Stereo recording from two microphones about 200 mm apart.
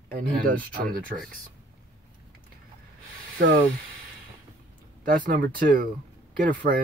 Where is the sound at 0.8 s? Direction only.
45° right (ahead or behind).